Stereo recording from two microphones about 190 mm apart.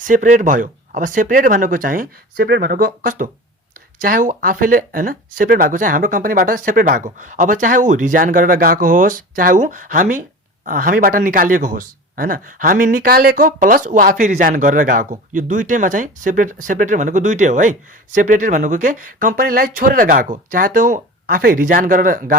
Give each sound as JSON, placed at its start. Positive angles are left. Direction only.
{"t": 0.0, "sound": "speech", "side_deg": -45}